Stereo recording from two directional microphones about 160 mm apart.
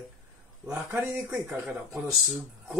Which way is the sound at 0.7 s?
5° right (ahead or behind).